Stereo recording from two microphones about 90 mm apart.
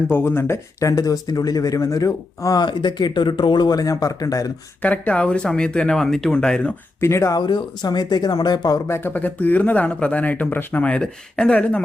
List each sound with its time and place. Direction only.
0.1 s speech: 25° left (ahead or behind)
2.6 s speech: 55° left (ahead or behind)
4.8 s speech: 15° left (ahead or behind)
7.0 s speech: 30° left (ahead or behind)
7.3 s speech: 55° left (ahead or behind)
8.9 s speech: 25° left (ahead or behind)